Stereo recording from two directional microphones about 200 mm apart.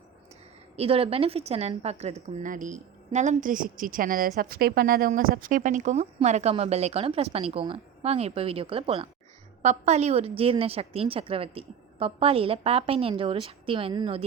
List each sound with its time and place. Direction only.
0.8 s a woman's voice: 30° right (ahead or behind)